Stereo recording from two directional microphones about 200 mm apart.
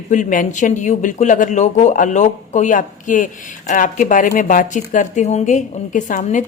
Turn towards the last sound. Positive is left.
turn(degrees=40)  # may be behind; listen again after turning